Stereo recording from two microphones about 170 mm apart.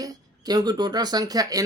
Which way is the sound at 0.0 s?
20° right (ahead or behind).